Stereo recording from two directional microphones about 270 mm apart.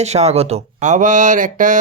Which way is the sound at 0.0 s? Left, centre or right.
Right.